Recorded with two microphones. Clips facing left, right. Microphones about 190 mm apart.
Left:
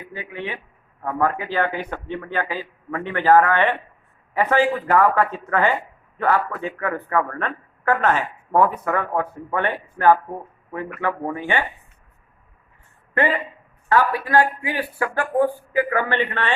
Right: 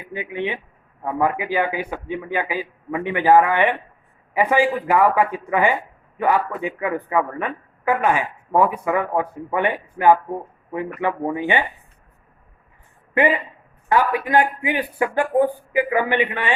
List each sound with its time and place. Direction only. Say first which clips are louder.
0.1 s a man's voice: right 6 dB; 20° right (ahead or behind)
13.2 s a man's voice: right 2 dB; 15° right (ahead or behind)